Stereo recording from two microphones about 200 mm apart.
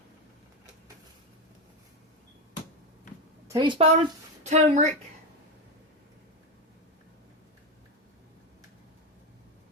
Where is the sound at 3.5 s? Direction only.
20° right (ahead or behind).